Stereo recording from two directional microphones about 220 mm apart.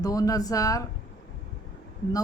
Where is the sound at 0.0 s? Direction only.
15° left (ahead or behind).